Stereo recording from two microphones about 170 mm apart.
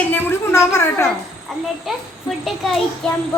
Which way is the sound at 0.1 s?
15° left (ahead or behind).